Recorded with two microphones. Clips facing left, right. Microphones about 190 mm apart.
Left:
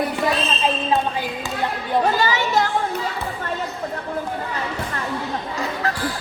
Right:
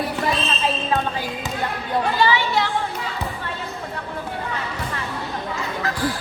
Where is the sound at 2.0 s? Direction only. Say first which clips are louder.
Even; 45° left (ahead or behind).